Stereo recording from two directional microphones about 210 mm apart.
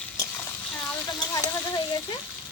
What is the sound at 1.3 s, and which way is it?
Speech, 15° left (ahead or behind).